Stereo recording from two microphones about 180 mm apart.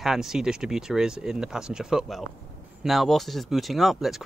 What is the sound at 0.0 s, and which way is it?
Speech, centre (ahead or behind).